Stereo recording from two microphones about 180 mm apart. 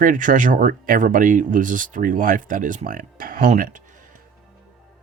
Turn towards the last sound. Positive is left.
turn(degrees=-45)  # may be behind; listen again after turning